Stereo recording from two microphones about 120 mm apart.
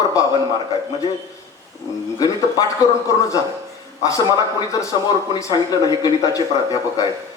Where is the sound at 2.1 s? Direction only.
30° left (ahead or behind).